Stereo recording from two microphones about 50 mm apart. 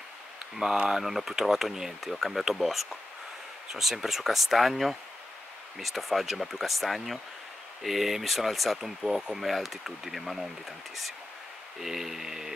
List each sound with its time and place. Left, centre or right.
0.9 s speech: centre
11.8 s speech: centre